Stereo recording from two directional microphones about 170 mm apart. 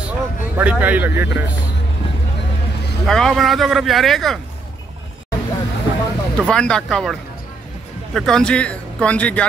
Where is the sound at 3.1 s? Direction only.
Centre (ahead or behind).